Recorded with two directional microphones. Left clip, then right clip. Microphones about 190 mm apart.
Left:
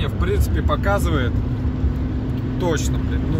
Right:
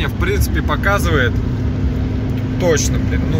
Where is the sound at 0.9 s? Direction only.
5° right (ahead or behind).